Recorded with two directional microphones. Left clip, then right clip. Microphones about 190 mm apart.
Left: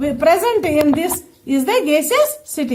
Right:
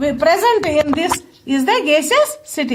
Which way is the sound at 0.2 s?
20° right (ahead or behind).